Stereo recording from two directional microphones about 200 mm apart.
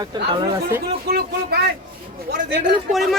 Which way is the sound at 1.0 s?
50° right (ahead or behind).